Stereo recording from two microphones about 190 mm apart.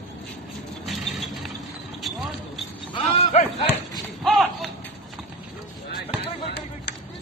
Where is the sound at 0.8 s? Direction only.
Centre (ahead or behind).